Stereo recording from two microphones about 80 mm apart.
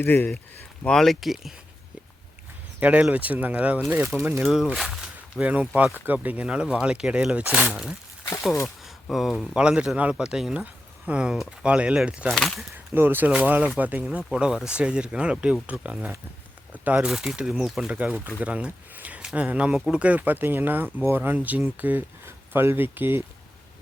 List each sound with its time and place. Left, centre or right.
0.0 s speech: left
0.9 s speech: centre
2.8 s speech: centre
3.8 s speech: right
4.4 s speech: centre
9.0 s speech: centre
9.6 s speech: centre
10.6 s a sound: centre
11.3 s speech: centre
12.3 s speech: centre
12.7 s speech: right
14.0 s speech: centre
17.1 s speech: centre; by 23.2 s right